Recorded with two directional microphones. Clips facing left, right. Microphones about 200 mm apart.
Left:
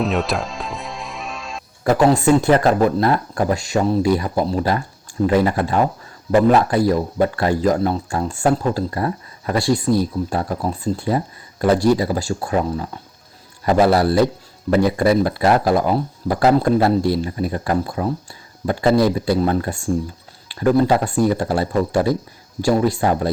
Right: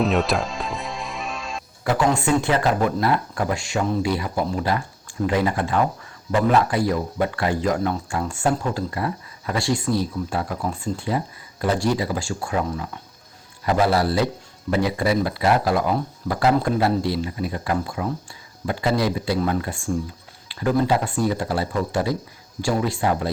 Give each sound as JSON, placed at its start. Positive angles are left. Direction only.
{"t": 0.0, "sound": "music", "side_deg": 0}
{"t": 1.8, "sound": "speech", "side_deg": 40}